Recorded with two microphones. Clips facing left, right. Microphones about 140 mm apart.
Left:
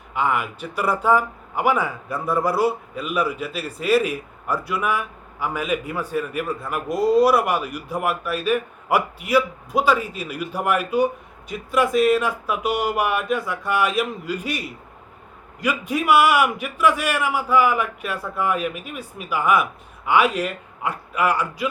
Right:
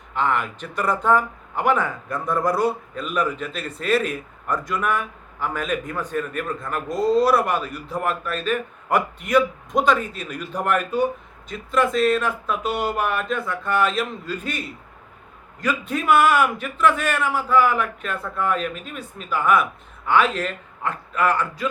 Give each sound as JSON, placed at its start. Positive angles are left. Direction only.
{"t": 0.1, "sound": "a man's voice", "side_deg": 10}